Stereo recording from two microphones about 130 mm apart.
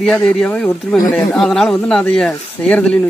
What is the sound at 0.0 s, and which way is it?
Speech, 5° left (ahead or behind).